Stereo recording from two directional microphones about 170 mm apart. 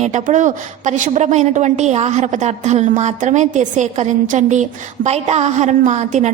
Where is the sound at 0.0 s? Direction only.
45° right (ahead or behind).